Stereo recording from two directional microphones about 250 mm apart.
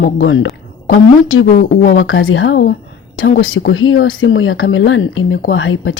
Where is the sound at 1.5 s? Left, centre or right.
Left.